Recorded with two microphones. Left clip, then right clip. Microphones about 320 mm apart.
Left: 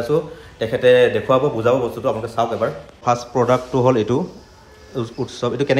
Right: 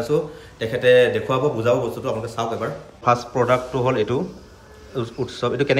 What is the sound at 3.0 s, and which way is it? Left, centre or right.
Speech, centre.